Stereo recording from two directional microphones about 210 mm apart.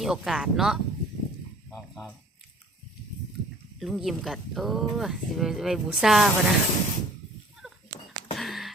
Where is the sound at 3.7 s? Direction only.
Centre (ahead or behind).